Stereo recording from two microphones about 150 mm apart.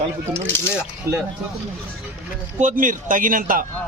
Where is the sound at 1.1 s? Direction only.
20° right (ahead or behind).